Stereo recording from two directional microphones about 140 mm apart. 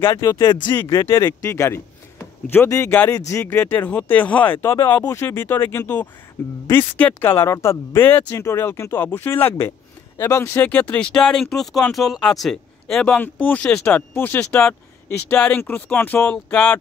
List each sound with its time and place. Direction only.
0.0 s speech: 30° left (ahead or behind)
0.7 s speech: 20° left (ahead or behind)